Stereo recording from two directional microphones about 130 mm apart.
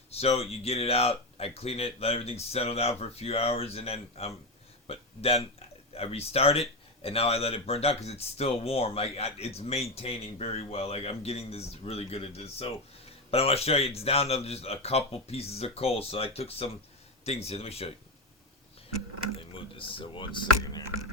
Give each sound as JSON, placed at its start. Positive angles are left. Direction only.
{"t": 0.1, "sound": "speech", "side_deg": 50}
{"t": 19.4, "sound": "speech", "side_deg": 40}
{"t": 20.6, "sound": "a sound", "side_deg": 30}